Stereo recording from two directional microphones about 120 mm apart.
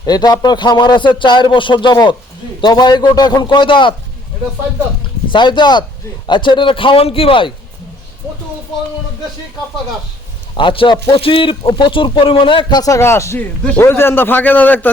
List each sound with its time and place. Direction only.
0.0 s speech: 35° left (ahead or behind)
5.3 s speech: 40° left (ahead or behind)
10.5 s speech: 45° left (ahead or behind)
12.8 s a man's voice: 25° left (ahead or behind)